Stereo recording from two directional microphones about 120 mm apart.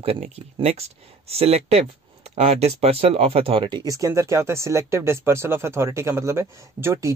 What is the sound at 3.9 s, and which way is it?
Speech, 25° right (ahead or behind).